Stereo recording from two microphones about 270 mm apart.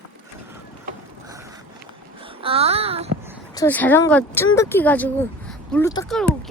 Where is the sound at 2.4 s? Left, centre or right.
Right.